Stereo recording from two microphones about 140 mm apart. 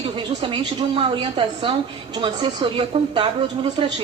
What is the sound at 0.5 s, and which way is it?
A man's voice, 40° right (ahead or behind).